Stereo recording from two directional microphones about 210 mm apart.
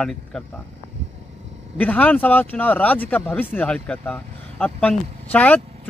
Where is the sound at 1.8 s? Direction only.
5° left (ahead or behind).